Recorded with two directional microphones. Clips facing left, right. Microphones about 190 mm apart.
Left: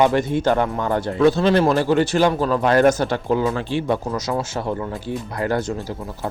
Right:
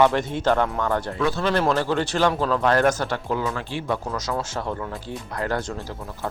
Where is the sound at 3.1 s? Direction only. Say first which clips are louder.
Left 6 dB; 25° left (ahead or behind).